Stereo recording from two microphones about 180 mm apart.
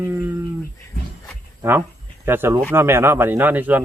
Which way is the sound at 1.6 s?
15° right (ahead or behind).